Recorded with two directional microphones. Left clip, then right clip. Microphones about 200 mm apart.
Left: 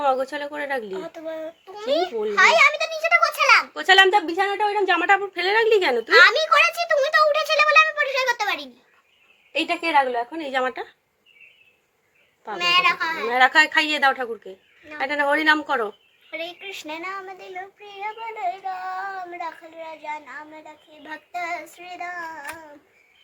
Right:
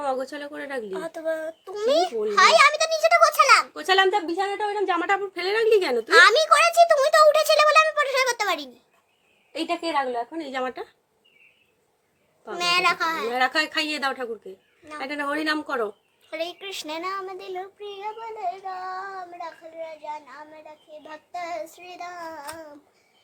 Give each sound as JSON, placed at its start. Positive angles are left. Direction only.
{"t": 0.0, "sound": "speech", "side_deg": -5}
{"t": 0.9, "sound": "speech", "side_deg": -70}
{"t": 2.3, "sound": "a sound", "side_deg": -65}
{"t": 3.8, "sound": "speech", "side_deg": -10}
{"t": 6.1, "sound": "a sound", "side_deg": -70}
{"t": 9.5, "sound": "a woman's voice", "side_deg": 0}
{"t": 12.5, "sound": "speech", "side_deg": -70}
{"t": 13.2, "sound": "speech", "side_deg": -10}
{"t": 16.3, "sound": "speech", "side_deg": -70}
{"t": 18.0, "sound": "a child's voice", "side_deg": -30}
{"t": 22.1, "sound": "child singing", "side_deg": -45}